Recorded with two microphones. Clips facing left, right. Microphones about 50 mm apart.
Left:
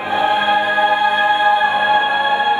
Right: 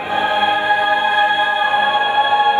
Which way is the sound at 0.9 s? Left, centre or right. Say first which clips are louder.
Even; right.